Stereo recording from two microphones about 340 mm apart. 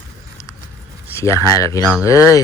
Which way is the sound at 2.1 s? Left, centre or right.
Centre.